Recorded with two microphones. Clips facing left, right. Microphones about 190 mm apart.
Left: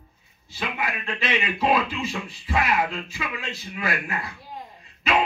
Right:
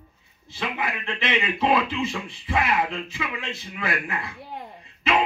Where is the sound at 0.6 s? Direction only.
25° right (ahead or behind).